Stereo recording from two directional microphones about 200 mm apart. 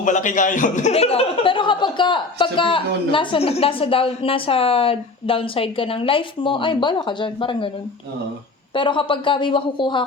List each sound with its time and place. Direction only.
0.0 s a man's voice: 40° left (ahead or behind)
8.7 s a man's voice: 25° left (ahead or behind)